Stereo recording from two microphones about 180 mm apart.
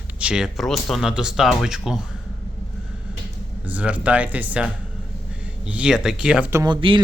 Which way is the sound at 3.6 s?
5° right (ahead or behind).